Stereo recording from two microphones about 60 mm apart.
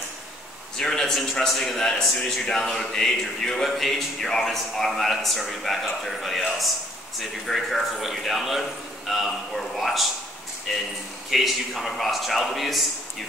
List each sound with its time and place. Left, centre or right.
0.7 s a man's voice: centre
11.2 s speech: centre